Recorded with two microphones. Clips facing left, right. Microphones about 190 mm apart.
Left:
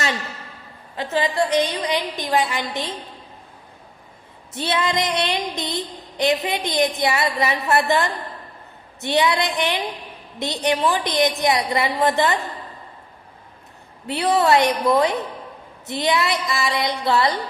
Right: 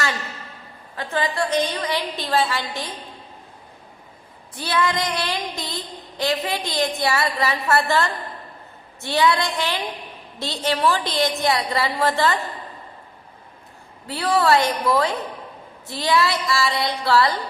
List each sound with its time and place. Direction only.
0.9 s a woman's voice: 20° left (ahead or behind)
4.5 s child singing: 20° left (ahead or behind)
10.4 s a woman's voice: 20° left (ahead or behind)
14.1 s child singing: 20° left (ahead or behind)